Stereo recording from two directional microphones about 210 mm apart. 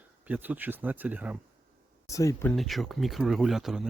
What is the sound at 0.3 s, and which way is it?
Speech, 10° right (ahead or behind).